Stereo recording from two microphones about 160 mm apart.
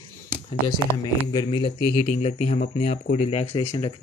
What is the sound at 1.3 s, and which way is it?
Speech, 30° left (ahead or behind).